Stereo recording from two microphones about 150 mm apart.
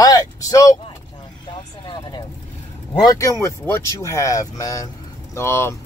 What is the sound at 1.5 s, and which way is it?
Vehicle, 30° left (ahead or behind).